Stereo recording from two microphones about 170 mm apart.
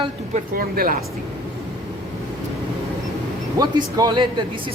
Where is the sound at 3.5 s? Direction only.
20° right (ahead or behind).